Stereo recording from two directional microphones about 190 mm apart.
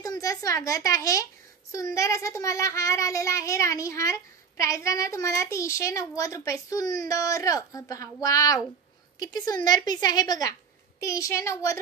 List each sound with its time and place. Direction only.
0.0 s a woman's voice: 20° left (ahead or behind)